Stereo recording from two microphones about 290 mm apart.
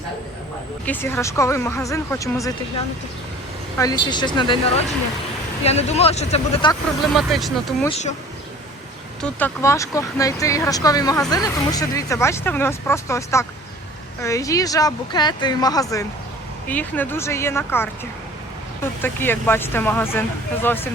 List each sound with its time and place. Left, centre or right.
0.9 s speech: centre
3.8 s speech: centre
5.6 s speech: left
7.1 s speech: centre
7.9 s speech: left
9.2 s speech: centre
19.0 s speech: centre